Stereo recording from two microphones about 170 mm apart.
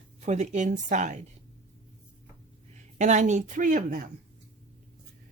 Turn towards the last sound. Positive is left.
turn(degrees=-50)  # may be behind; listen again after turning